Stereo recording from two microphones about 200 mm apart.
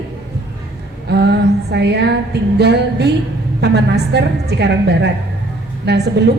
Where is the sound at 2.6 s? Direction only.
55° right (ahead or behind).